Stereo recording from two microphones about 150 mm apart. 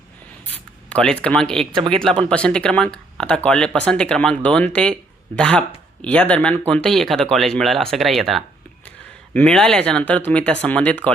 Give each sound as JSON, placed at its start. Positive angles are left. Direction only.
{"t": 0.4, "sound": "writing", "side_deg": 10}
{"t": 1.7, "sound": "speech", "side_deg": -35}
{"t": 2.3, "sound": "speech", "side_deg": 5}